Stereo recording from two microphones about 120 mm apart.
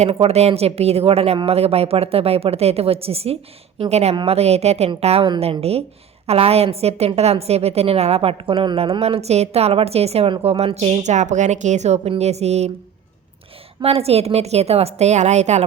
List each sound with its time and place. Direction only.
0.0 s a woman's voice: 55° right (ahead or behind)
13.8 s a woman's voice: 60° right (ahead or behind)